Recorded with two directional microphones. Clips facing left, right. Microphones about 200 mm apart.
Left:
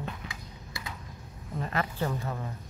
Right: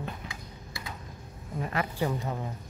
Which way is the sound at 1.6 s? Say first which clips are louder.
Right 1 dB; 10° right (ahead or behind).